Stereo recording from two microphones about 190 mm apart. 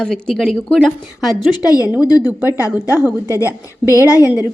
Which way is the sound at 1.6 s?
20° left (ahead or behind).